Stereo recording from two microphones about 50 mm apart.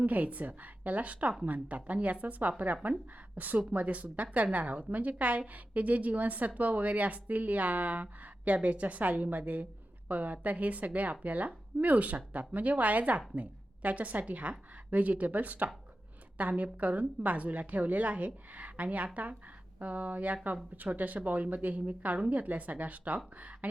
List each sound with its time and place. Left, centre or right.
0.0 s a woman's voice: right